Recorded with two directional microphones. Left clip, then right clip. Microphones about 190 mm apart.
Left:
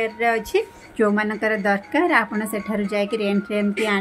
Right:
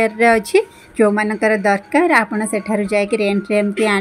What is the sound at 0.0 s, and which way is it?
A woman's voice, 30° right (ahead or behind).